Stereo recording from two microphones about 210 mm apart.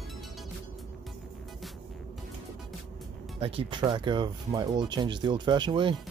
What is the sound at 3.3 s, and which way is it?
Speech, 25° right (ahead or behind).